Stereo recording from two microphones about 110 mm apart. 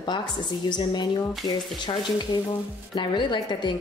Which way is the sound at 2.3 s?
35° left (ahead or behind).